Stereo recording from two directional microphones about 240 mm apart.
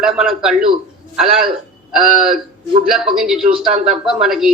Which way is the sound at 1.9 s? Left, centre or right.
Centre.